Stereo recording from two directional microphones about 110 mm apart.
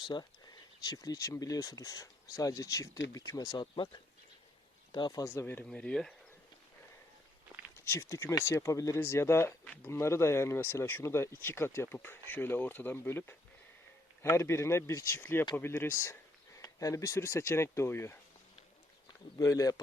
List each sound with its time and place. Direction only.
0.0 s speech: 40° left (ahead or behind); by 5.6 s 20° left (ahead or behind)
5.6 s speech: 10° left (ahead or behind)
7.9 s speech: 25° left (ahead or behind)
19.4 s speech: 30° left (ahead or behind)